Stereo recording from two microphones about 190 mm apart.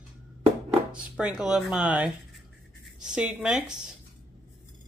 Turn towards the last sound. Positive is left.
turn(degrees=-5)  # may be behind; listen again after turning